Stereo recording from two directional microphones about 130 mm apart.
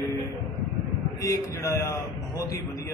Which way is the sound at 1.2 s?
25° left (ahead or behind).